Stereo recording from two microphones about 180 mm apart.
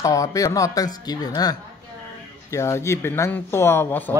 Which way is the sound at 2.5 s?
15° left (ahead or behind).